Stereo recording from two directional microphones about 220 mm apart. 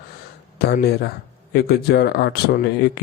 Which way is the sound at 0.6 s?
45° left (ahead or behind).